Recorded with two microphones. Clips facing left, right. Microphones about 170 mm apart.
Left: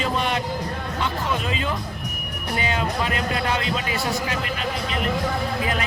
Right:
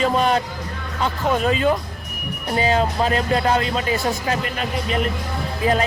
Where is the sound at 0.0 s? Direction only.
40° right (ahead or behind).